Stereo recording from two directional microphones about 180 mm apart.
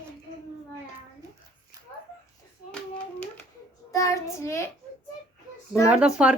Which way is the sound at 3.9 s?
20° left (ahead or behind).